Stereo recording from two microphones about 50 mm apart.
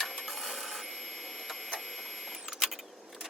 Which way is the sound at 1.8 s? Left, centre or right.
Centre.